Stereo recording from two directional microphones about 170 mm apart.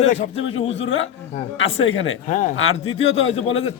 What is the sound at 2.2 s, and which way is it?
Speech, 50° left (ahead or behind).